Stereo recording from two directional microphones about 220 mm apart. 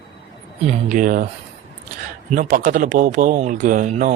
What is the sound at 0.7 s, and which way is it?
Speech, 35° right (ahead or behind).